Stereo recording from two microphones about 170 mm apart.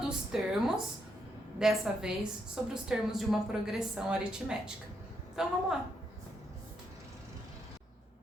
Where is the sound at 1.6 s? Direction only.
5° right (ahead or behind).